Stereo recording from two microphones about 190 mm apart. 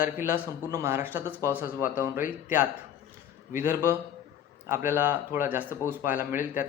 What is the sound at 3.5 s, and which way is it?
Speech, 10° right (ahead or behind).